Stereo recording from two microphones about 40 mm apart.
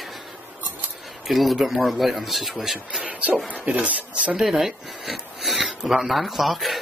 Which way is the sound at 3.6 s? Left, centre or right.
Right.